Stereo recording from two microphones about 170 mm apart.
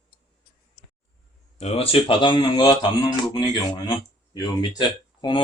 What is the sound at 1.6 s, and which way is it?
Speech, 35° left (ahead or behind).